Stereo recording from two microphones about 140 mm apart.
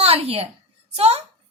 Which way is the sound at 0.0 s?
45° right (ahead or behind).